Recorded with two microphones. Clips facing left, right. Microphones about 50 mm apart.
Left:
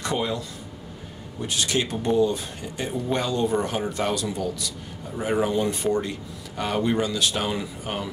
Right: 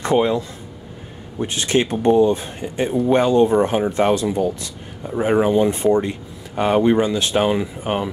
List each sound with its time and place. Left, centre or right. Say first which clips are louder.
0.0 s speech: right 9 dB; right